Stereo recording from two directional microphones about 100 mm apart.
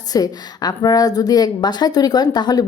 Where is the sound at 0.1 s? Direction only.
40° left (ahead or behind).